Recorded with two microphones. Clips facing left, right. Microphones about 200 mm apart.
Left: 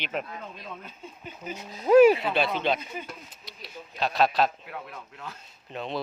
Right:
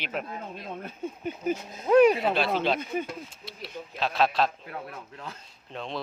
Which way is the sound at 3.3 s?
Centre (ahead or behind).